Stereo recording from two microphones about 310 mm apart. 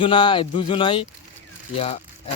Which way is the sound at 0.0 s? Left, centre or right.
Centre.